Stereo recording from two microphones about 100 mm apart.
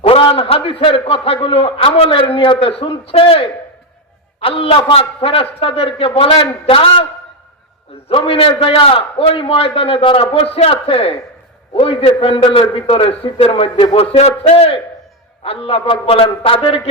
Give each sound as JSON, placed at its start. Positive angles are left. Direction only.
{"t": 0.0, "sound": "a man's voice", "side_deg": 70}
{"t": 8.3, "sound": "a man's voice", "side_deg": 70}
{"t": 13.9, "sound": "a man's voice", "side_deg": 85}